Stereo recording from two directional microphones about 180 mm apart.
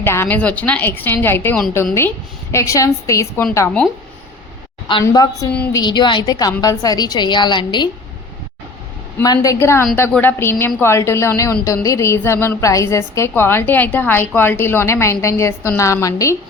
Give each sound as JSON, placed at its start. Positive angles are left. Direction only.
{"t": 0.0, "sound": "a woman's voice", "side_deg": 10}
{"t": 5.0, "sound": "a woman's voice", "side_deg": 20}
{"t": 9.1, "sound": "a woman's voice", "side_deg": 20}